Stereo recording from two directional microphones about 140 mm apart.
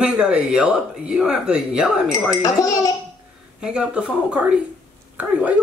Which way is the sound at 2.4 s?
25° left (ahead or behind).